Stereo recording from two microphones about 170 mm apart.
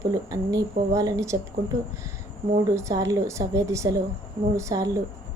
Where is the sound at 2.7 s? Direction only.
20° right (ahead or behind).